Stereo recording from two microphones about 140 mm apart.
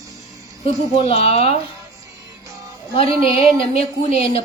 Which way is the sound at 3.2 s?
45° left (ahead or behind).